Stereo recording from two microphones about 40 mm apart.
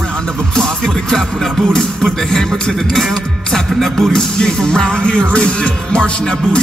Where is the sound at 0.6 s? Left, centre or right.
Centre.